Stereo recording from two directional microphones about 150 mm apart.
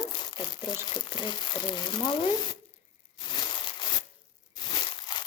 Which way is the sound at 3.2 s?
30° left (ahead or behind).